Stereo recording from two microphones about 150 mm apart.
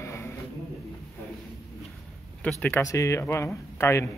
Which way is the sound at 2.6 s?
20° left (ahead or behind).